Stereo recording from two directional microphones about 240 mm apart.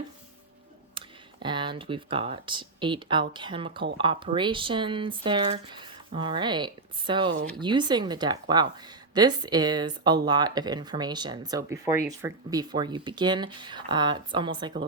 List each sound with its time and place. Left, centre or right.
0.9 s speech: centre